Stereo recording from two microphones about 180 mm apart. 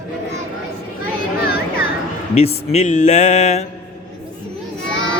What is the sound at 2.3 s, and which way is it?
Speech, 35° left (ahead or behind).